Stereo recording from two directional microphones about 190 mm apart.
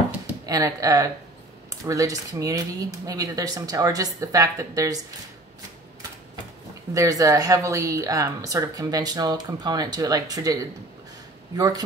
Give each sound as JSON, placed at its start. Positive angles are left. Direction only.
{"t": 0.5, "sound": "speech", "side_deg": -20}
{"t": 6.9, "sound": "a woman's voice", "side_deg": -20}